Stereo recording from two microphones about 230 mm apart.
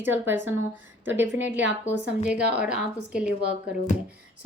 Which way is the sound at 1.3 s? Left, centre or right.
Right.